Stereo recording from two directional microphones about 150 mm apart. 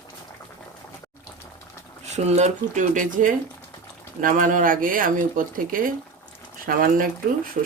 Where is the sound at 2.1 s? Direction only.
50° right (ahead or behind).